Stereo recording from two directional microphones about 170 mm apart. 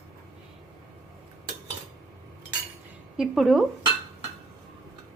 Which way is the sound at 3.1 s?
Centre (ahead or behind).